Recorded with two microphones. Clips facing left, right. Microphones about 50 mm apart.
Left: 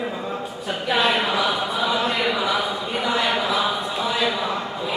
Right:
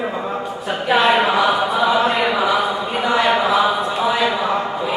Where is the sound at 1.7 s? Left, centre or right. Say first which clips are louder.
Right 6 dB; centre.